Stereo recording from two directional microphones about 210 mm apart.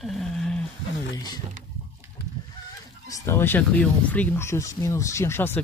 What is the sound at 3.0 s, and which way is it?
Speech, 10° left (ahead or behind).